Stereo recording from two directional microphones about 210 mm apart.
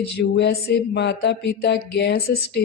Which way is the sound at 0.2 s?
55° left (ahead or behind).